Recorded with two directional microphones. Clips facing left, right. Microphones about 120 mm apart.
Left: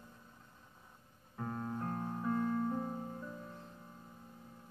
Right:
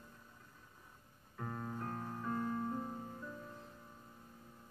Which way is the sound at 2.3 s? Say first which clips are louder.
Left 4 dB; 5° right (ahead or behind).